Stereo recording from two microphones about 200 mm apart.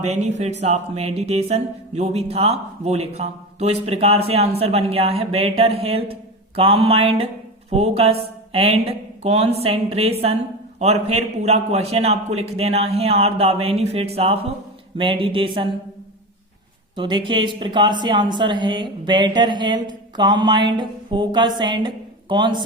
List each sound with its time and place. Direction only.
0.1 s speech: 35° right (ahead or behind)
16.9 s speech: 25° right (ahead or behind)